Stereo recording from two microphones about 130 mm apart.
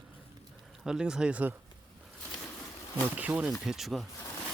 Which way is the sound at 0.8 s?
5° right (ahead or behind).